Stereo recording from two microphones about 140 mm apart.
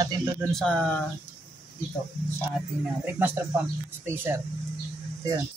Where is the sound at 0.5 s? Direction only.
5° left (ahead or behind).